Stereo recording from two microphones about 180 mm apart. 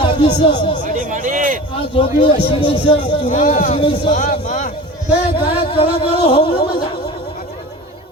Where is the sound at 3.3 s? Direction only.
45° left (ahead or behind); by 4.1 s 30° left (ahead or behind).